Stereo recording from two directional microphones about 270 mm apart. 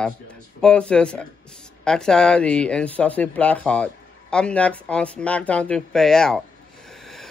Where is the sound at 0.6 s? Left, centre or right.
Centre.